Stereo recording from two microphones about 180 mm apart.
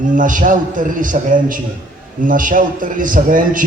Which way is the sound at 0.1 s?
45° right (ahead or behind).